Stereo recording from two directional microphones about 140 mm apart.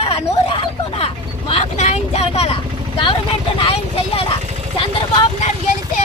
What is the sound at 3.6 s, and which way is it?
Vehicle, 40° left (ahead or behind).